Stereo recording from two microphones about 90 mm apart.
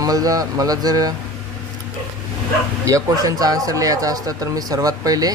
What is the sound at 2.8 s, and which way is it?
Speech, 40° right (ahead or behind).